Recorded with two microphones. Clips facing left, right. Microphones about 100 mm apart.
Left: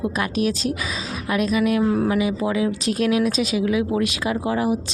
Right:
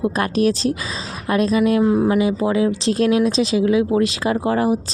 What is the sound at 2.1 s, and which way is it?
Speech, 30° right (ahead or behind).